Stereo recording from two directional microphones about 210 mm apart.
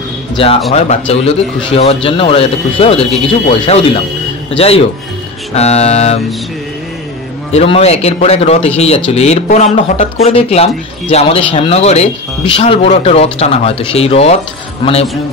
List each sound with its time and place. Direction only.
0.4 s speech: 25° left (ahead or behind)
5.5 s mantra: 30° left (ahead or behind)
7.5 s speech: 30° left (ahead or behind)